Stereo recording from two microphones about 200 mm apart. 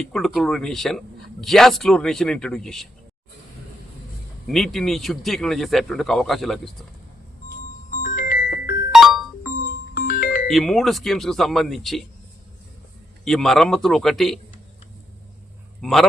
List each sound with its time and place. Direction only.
0.0 s speech: centre (ahead or behind)
4.4 s speech: centre (ahead or behind)
7.5 s music: 40° left (ahead or behind)
8.9 s music: centre (ahead or behind)
9.4 s music: 45° left (ahead or behind)
10.4 s speech: centre (ahead or behind)
13.2 s speech: centre (ahead or behind)
15.8 s a man's voice: centre (ahead or behind)